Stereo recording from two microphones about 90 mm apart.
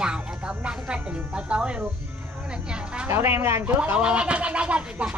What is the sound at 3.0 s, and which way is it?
Speech, 30° right (ahead or behind).